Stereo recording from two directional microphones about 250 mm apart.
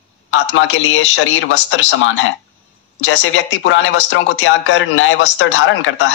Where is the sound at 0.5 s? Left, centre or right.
Left.